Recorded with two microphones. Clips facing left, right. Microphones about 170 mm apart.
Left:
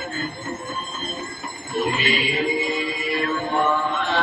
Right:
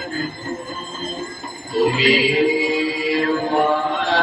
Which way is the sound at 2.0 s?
90° right.